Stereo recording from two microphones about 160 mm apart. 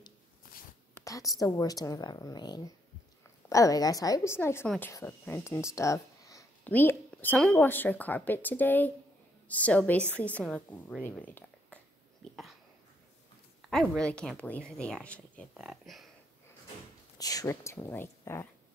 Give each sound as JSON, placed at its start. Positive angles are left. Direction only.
{"t": 1.0, "sound": "a woman's voice", "side_deg": 20}
{"t": 13.7, "sound": "speech", "side_deg": 5}
{"t": 15.5, "sound": "speech", "side_deg": -5}
{"t": 17.2, "sound": "a woman's voice", "side_deg": 20}